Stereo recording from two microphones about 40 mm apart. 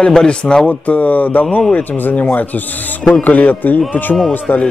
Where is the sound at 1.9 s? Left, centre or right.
Left.